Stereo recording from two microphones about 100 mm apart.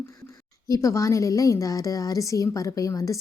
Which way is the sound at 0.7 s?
30° left (ahead or behind).